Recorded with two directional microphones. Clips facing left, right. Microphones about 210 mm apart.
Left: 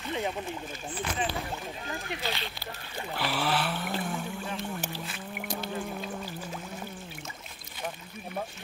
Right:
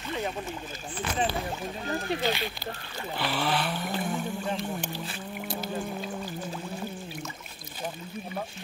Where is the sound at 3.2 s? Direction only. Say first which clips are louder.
Right 1 dB; 5° left (ahead or behind).